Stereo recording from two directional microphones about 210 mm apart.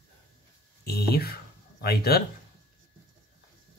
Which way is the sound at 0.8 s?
50° left (ahead or behind).